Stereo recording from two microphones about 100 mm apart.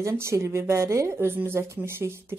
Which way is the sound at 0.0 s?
25° right (ahead or behind).